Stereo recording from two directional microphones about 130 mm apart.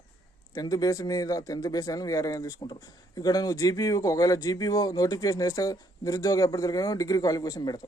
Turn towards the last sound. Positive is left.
turn(degrees=30)  # may be behind; listen again after turning